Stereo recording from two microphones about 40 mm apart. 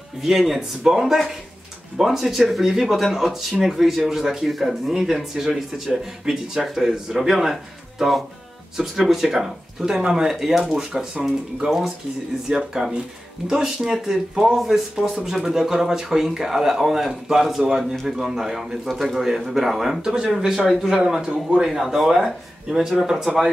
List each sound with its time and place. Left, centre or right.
0.2 s speech: centre
6.6 s speech: centre
10.5 s speech: centre
10.8 s speech: centre
21.2 s a man's voice: right
21.6 s speech: centre